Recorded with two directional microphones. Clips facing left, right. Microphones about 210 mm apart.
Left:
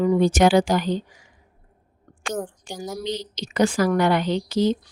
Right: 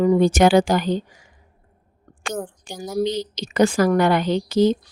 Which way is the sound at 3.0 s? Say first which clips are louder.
Right 4 dB; 50° right (ahead or behind).